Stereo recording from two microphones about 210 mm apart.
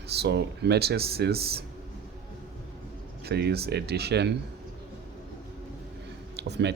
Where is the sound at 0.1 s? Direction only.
50° right (ahead or behind).